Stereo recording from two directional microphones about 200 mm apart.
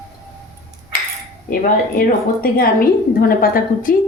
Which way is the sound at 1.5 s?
45° left (ahead or behind).